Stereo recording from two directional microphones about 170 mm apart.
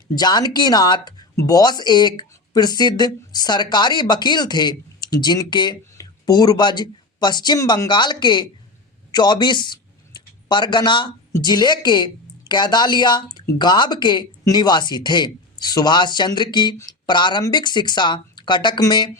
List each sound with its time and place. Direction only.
0.2 s speech: 25° left (ahead or behind)